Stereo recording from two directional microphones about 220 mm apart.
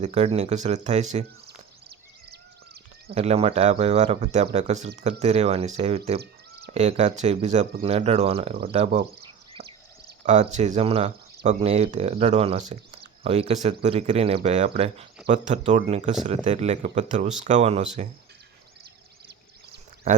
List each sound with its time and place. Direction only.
0.0 s speech: 30° right (ahead or behind)
1.5 s a sound: 45° right (ahead or behind)
3.2 s speech: 25° right (ahead or behind)
9.6 s a sound: 25° right (ahead or behind)
10.2 s speech: 30° right (ahead or behind)
20.1 s speech: 30° right (ahead or behind)